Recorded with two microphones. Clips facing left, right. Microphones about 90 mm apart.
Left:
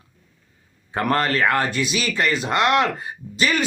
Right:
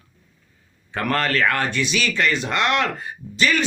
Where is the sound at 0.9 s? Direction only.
30° left (ahead or behind).